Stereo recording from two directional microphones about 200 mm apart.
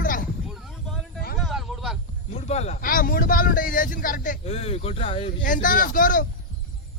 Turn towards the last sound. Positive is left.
turn(degrees=45)  # may be behind; listen again after turning